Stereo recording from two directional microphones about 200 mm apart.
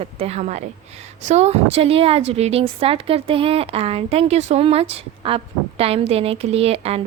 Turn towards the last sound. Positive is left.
turn(degrees=-30)  # may be behind; listen again after turning